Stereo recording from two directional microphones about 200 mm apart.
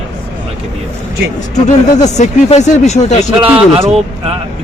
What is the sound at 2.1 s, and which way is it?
Speech, 35° left (ahead or behind).